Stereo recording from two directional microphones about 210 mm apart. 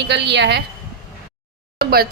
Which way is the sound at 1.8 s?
45° right (ahead or behind).